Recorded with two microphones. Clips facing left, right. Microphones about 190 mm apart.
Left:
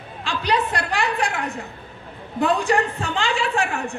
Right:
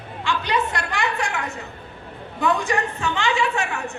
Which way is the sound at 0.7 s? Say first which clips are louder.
Left 2 dB; 35° left (ahead or behind).